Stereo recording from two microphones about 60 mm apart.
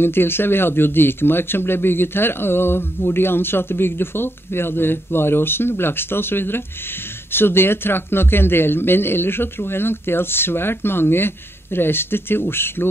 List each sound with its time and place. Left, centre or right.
0.0 s speech: left